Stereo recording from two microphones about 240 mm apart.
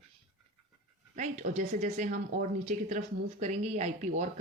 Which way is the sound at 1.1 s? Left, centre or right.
Right.